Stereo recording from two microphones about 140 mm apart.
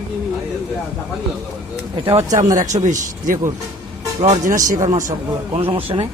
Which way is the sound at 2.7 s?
60° right (ahead or behind).